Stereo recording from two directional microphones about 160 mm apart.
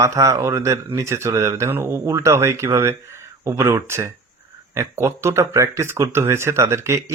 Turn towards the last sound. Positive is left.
turn(degrees=-15)  # may be behind; listen again after turning